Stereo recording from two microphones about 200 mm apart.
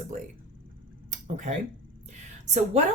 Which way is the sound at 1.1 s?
35° right (ahead or behind).